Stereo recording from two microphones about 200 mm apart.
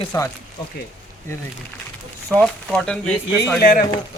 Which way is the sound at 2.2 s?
5° left (ahead or behind).